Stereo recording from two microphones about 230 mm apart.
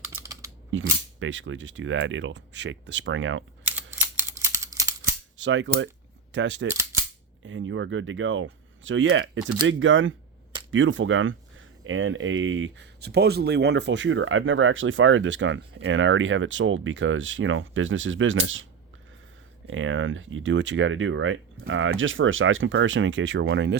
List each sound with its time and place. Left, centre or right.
0.2 s typing: centre
0.7 s speech: right
3.6 s a sound: centre
3.9 s scissors: centre
5.4 s speech: right
6.7 s cap gun: centre
7.4 s speech: right
19.6 s speech: right